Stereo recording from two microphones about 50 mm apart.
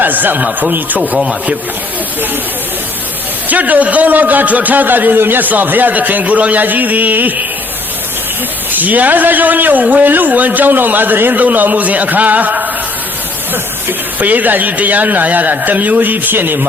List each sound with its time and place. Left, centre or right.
0.0 s a man's voice: right
3.5 s a man's voice: right
8.7 s a man's voice: right
14.2 s a man's voice: right